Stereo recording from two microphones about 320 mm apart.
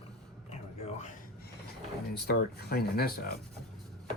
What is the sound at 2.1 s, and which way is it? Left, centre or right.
Speech, left.